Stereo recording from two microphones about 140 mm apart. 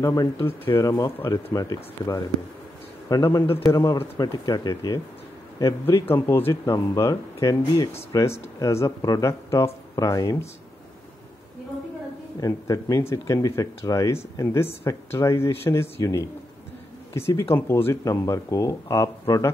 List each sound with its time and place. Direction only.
0.0 s speech: 25° left (ahead or behind)
12.4 s speech: 25° left (ahead or behind)
17.6 s speech: 15° left (ahead or behind)